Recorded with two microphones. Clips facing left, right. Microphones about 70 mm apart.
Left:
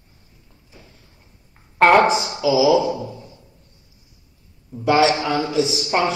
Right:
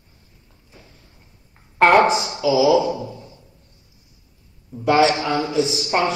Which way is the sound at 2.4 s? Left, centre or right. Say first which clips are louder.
Even; centre.